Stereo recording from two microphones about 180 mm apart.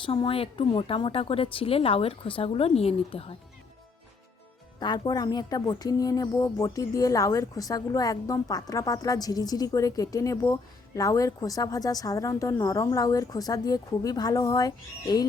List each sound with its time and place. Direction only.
0.0 s speech: 30° left (ahead or behind)
4.8 s speech: 25° left (ahead or behind)